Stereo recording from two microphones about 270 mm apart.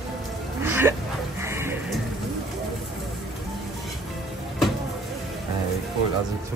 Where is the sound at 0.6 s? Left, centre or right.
Centre.